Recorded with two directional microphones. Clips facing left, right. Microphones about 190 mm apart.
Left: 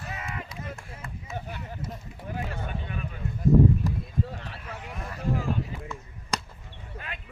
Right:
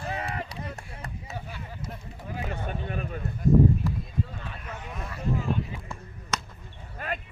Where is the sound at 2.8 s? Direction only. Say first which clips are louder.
Right 3 dB; 45° right (ahead or behind).